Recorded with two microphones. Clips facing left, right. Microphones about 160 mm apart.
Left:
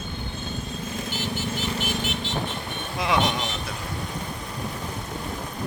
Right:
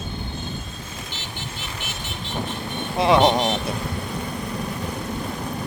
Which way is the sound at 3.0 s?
30° right (ahead or behind).